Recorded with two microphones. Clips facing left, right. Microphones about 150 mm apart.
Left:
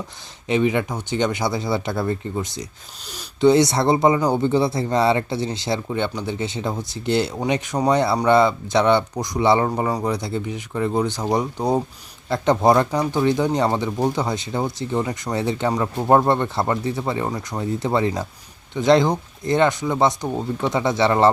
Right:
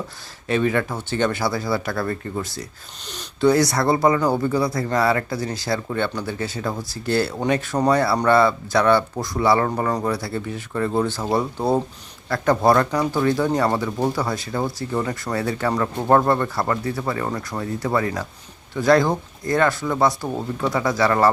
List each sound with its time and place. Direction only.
0.4 s speech: 20° left (ahead or behind)